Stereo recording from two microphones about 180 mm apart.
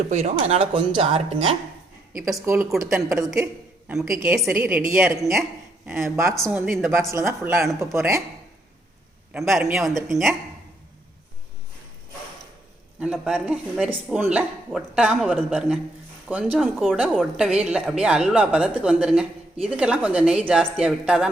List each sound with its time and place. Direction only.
0.1 s speech: 35° right (ahead or behind)
2.4 s a woman's voice: 15° right (ahead or behind)
4.4 s a woman's voice: 10° right (ahead or behind)
6.4 s speech: centre (ahead or behind)
7.1 s a woman's voice: 15° right (ahead or behind)
9.3 s speech: centre (ahead or behind)
13.0 s a woman's voice: 5° right (ahead or behind)